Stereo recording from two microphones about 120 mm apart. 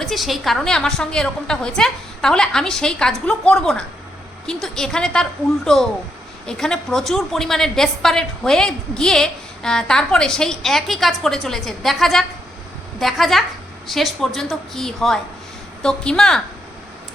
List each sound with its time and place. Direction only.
0.0 s a woman's voice: centre (ahead or behind)